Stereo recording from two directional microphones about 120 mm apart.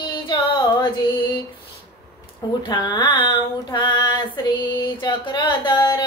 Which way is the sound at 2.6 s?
35° left (ahead or behind).